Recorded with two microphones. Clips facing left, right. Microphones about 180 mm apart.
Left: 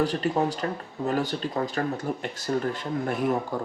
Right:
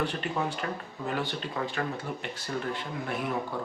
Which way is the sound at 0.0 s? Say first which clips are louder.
Left 6 dB; 35° left (ahead or behind).